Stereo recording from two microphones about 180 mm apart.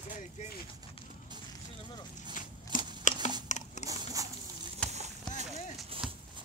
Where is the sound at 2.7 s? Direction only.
50° left (ahead or behind).